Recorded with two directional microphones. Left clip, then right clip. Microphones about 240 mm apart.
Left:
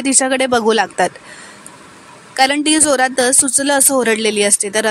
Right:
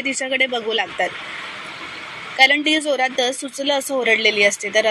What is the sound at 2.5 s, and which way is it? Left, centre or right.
A woman's voice, left.